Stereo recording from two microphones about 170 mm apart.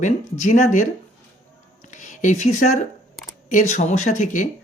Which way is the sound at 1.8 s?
45° left (ahead or behind).